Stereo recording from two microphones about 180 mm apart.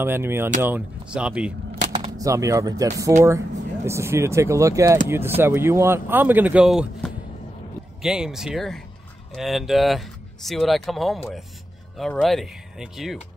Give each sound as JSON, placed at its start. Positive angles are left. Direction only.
{"t": 0.0, "sound": "speech", "side_deg": -15}
{"t": 2.1, "sound": "speech", "side_deg": -15}